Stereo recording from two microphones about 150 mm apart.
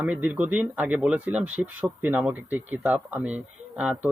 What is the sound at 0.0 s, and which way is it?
Speech, 10° right (ahead or behind).